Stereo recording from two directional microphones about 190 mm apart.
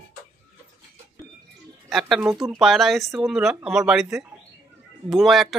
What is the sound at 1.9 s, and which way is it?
Speech, centre (ahead or behind).